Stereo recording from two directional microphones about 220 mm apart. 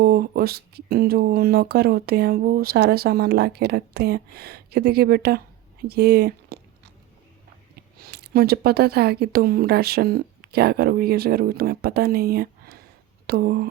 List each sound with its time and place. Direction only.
0.0 s speech: 40° right (ahead or behind)
7.9 s speech: 45° right (ahead or behind)